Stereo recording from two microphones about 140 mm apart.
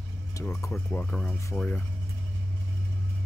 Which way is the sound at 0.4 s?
20° left (ahead or behind).